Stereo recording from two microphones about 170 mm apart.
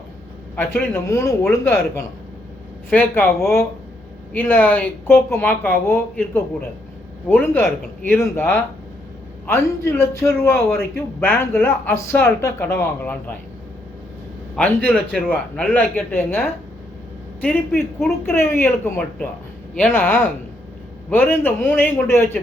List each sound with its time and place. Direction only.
0.5 s speech: 10° left (ahead or behind)
14.5 s speech: 5° left (ahead or behind)